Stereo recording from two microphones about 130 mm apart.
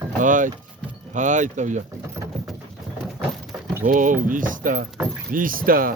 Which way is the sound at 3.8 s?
90° right.